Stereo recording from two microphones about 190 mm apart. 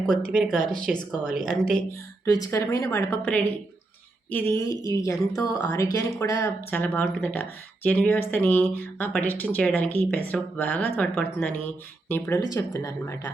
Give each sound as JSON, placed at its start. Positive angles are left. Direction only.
{"t": 0.1, "sound": "speech", "side_deg": 0}
{"t": 2.2, "sound": "speech", "side_deg": 20}